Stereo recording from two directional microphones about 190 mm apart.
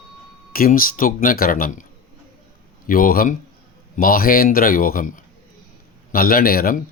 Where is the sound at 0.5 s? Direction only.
50° left (ahead or behind).